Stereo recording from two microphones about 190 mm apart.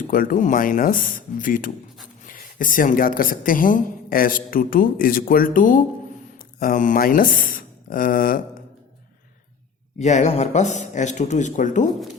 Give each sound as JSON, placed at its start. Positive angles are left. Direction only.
{"t": 0.0, "sound": "a woman's voice", "side_deg": 45}
{"t": 10.0, "sound": "speech", "side_deg": 40}